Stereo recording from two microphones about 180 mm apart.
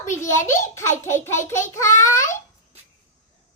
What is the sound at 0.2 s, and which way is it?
A child's voice, 15° left (ahead or behind).